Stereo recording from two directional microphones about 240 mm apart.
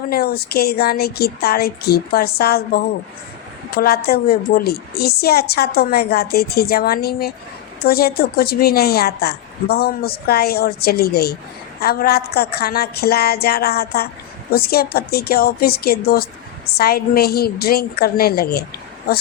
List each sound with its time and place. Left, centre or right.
0.1 s a woman's voice: left